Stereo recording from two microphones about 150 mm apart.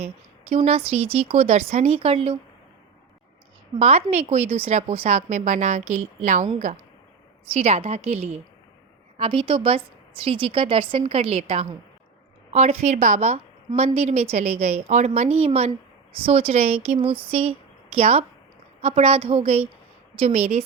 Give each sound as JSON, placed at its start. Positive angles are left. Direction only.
{"t": 0.0, "sound": "speech", "side_deg": -40}
{"t": 3.8, "sound": "a woman's voice", "side_deg": -45}
{"t": 7.5, "sound": "a woman's voice", "side_deg": -45}